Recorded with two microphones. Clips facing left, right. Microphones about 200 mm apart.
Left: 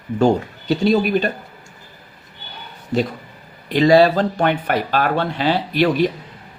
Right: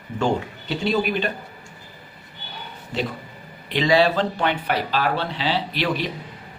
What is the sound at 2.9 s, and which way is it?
Speech, 45° left (ahead or behind).